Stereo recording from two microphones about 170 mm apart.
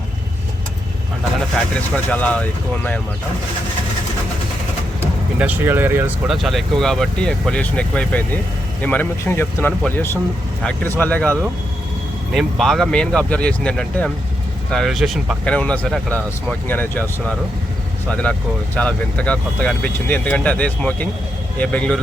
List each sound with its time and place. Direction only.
2.0 s speech: 10° left (ahead or behind)
5.4 s speech: 10° right (ahead or behind)
6.3 s speech: centre (ahead or behind)